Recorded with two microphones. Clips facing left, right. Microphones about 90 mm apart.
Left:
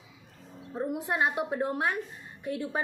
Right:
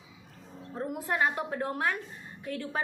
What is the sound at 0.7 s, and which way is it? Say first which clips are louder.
A woman's voice: left 2 dB; 15° left (ahead or behind).